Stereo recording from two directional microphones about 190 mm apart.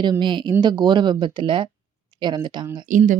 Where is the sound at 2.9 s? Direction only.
40° right (ahead or behind).